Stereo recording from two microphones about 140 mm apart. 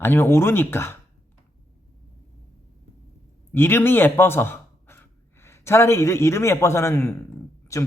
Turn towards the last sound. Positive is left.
turn(degrees=20)  # may be behind; listen again after turning